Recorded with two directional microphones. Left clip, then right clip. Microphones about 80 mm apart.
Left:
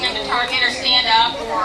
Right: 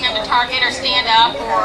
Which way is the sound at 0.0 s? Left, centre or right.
Right.